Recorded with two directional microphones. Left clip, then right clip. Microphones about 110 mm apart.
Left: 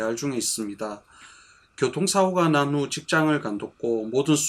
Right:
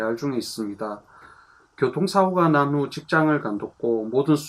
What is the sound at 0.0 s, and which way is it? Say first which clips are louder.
Speech: right 1 dB; 15° left (ahead or behind).